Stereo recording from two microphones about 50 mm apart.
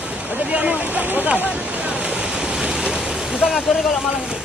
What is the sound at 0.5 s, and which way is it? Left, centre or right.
Boat, right.